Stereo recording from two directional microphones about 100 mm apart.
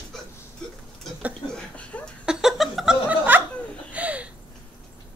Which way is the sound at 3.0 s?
20° right (ahead or behind).